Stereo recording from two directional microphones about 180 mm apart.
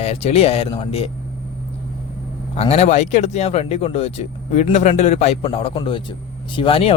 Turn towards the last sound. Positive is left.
turn(degrees=30)  # may be behind; listen again after turning